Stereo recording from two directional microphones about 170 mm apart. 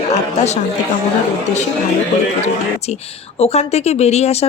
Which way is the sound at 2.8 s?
40° left (ahead or behind).